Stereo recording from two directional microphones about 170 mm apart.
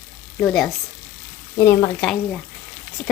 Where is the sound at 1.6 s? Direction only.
15° left (ahead or behind).